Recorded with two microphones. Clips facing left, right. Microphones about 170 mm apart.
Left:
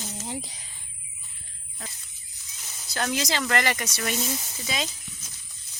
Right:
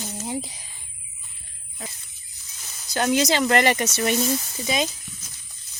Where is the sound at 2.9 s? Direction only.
20° right (ahead or behind).